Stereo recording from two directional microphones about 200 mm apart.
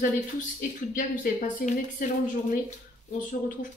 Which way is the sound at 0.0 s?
40° left (ahead or behind).